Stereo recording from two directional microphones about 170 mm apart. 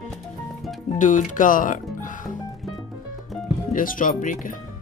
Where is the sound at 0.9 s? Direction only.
50° left (ahead or behind).